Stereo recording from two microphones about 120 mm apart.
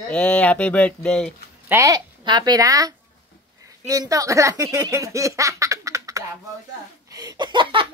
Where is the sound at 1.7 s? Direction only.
25° right (ahead or behind).